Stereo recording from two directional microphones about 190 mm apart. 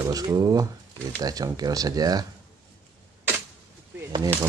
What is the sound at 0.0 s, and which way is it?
Speech, 20° right (ahead or behind).